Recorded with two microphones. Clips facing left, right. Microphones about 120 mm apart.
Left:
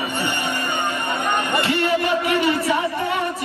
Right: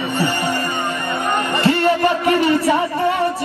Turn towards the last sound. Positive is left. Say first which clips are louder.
# right 4 dB
turn(degrees=-40)  # may be behind; listen again after turning